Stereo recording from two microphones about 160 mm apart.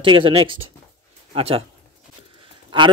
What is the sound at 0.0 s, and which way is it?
Speech, 30° right (ahead or behind).